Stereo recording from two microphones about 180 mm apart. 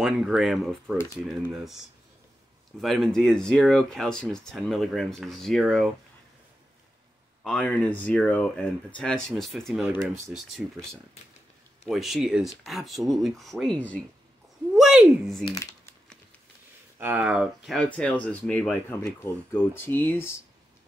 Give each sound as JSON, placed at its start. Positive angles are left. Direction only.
{"t": 0.0, "sound": "speech", "side_deg": 0}
{"t": 2.8, "sound": "speech", "side_deg": 0}
{"t": 7.4, "sound": "speech", "side_deg": 5}
{"t": 15.4, "sound": "speech", "side_deg": 20}
{"t": 17.0, "sound": "speech", "side_deg": -5}